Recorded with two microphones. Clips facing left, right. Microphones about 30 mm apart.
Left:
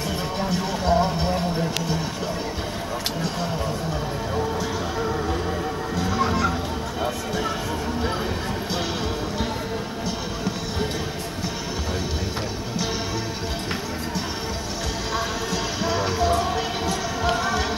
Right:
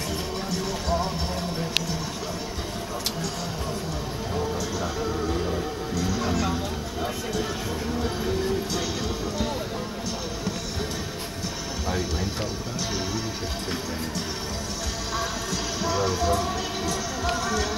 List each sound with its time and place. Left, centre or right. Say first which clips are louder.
0.5 s a sound: left 5 dB; centre
5.9 s music: left 4 dB; left
15.1 s music: left 2 dB; centre